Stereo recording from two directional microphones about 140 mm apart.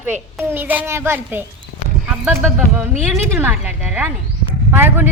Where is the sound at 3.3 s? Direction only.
15° right (ahead or behind).